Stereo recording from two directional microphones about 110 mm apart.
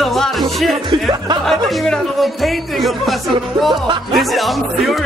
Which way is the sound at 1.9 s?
Centre (ahead or behind).